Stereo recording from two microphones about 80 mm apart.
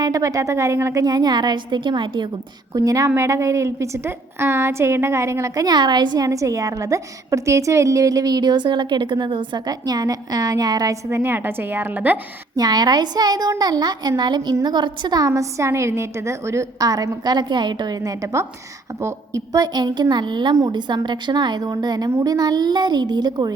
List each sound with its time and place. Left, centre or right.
0.0 s a woman's voice: right
1.0 s a woman's voice: right
2.7 s a woman's voice: right
5.6 s a woman's voice: right
6.2 s a woman's voice: right
9.6 s a woman's voice: right
11.1 s a woman's voice: right
12.5 s a woman's voice: right
15.3 s a woman's voice: right
20.6 s a woman's voice: right